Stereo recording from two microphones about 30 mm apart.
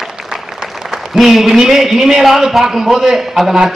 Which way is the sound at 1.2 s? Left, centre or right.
Centre.